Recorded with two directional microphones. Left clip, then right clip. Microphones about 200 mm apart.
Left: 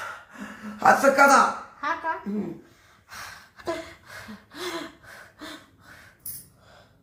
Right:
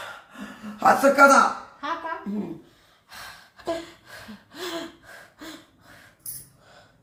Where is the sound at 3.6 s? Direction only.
Centre (ahead or behind).